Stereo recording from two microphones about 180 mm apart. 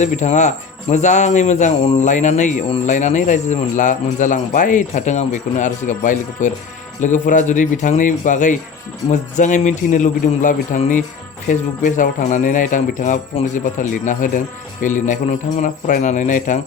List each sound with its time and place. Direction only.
0.0 s speech: 40° left (ahead or behind)